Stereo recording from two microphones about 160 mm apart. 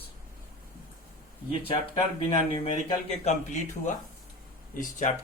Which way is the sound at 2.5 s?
35° left (ahead or behind).